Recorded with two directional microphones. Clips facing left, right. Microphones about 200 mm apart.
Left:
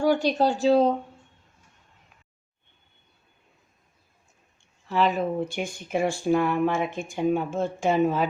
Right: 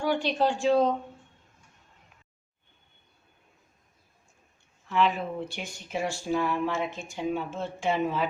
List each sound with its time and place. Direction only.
0.0 s speech: 40° left (ahead or behind)
4.9 s speech: 40° left (ahead or behind)